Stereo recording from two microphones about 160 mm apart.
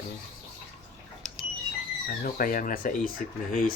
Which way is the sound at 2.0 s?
60° left (ahead or behind).